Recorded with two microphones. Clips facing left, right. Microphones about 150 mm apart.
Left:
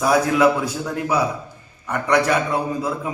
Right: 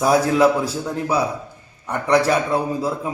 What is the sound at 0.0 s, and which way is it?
A man's voice, 30° right (ahead or behind).